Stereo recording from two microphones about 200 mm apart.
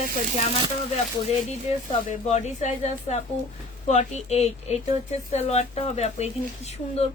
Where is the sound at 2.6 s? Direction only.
35° left (ahead or behind).